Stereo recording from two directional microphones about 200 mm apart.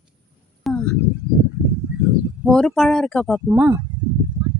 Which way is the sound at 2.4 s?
Centre (ahead or behind).